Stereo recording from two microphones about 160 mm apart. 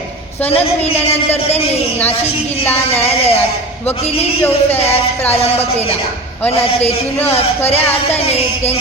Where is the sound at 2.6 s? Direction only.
10° left (ahead or behind).